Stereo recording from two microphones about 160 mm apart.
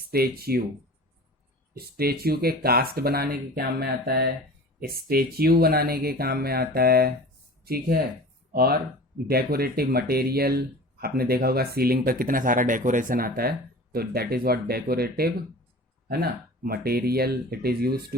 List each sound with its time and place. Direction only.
0.0 s speech: 75° right (ahead or behind)
1.7 s speech: 75° right (ahead or behind)